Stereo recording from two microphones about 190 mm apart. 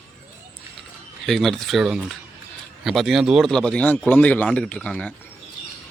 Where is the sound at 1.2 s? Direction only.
Centre (ahead or behind).